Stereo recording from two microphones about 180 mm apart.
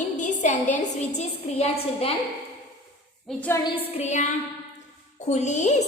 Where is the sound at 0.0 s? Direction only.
45° left (ahead or behind).